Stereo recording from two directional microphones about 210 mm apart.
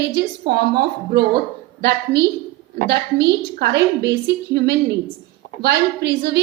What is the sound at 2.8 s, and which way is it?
A woman's voice, 50° right (ahead or behind).